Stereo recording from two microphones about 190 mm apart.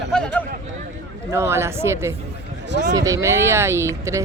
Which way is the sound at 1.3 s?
15° right (ahead or behind).